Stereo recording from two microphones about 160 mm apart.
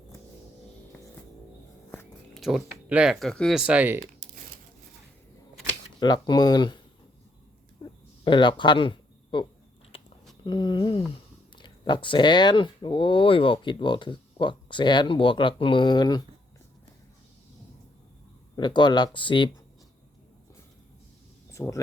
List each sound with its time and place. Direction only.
2.3 s speech: centre (ahead or behind)
6.0 s speech: 25° left (ahead or behind)
7.8 s a sound: 25° left (ahead or behind)
8.2 s speech: 30° left (ahead or behind)
9.9 s a sound: 35° left (ahead or behind)
10.4 s speech: 30° left (ahead or behind)
18.5 s speech: 30° left (ahead or behind)
21.6 s speech: 15° left (ahead or behind)